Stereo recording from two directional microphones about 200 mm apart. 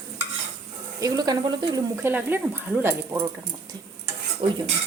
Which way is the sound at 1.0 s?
20° right (ahead or behind).